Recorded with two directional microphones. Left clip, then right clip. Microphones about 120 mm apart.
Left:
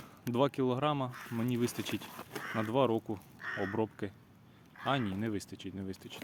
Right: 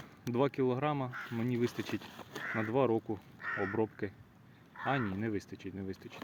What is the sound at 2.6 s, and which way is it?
Speech, 50° left (ahead or behind).